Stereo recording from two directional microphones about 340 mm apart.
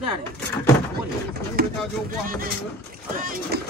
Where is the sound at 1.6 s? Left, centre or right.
Right.